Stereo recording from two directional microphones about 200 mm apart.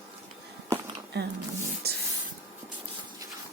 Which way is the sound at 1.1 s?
55° right (ahead or behind).